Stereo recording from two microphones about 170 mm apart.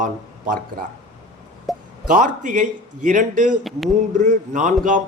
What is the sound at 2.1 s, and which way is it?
A man's voice, 50° right (ahead or behind).